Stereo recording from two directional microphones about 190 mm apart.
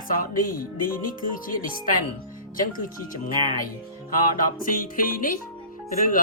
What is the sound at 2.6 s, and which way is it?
Speech, 45° left (ahead or behind).